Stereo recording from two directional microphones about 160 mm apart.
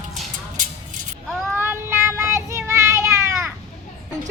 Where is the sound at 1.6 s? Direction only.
15° right (ahead or behind).